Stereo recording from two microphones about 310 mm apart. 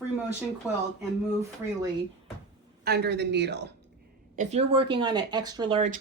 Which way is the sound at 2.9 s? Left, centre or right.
Right.